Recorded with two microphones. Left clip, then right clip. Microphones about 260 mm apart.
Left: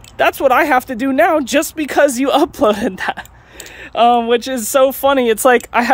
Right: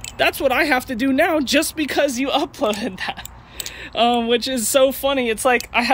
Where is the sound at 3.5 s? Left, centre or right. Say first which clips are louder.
Left 4 dB; centre.